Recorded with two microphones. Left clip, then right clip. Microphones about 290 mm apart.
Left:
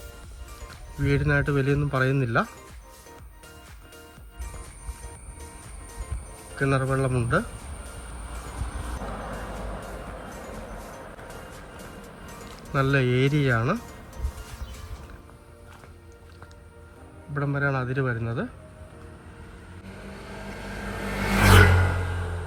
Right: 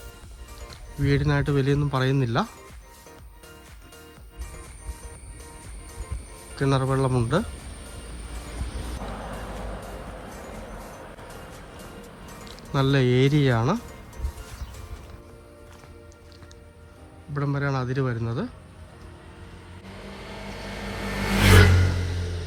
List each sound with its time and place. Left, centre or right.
0.6 s speech: centre
6.6 s a man's voice: centre
9.0 s music: centre
17.3 s a man's voice: centre
20.1 s vehicle: centre
21.5 s a sound: left